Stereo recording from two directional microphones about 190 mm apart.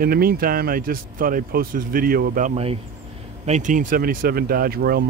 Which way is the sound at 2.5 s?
30° right (ahead or behind).